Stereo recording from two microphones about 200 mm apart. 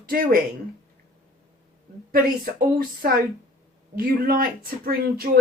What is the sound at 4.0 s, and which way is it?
Speech, 45° right (ahead or behind).